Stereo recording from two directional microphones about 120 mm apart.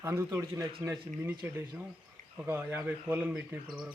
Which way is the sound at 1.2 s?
15° right (ahead or behind).